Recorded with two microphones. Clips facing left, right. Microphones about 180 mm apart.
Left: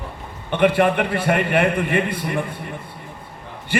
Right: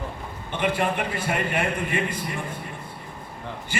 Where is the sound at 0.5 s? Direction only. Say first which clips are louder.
Left 8 dB; 60° left (ahead or behind).